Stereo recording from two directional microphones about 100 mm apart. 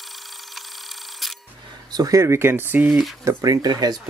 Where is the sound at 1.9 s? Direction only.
40° right (ahead or behind); by 2.9 s 20° right (ahead or behind).